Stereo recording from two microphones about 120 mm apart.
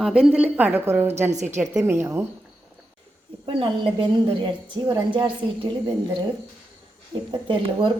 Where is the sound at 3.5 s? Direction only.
50° right (ahead or behind).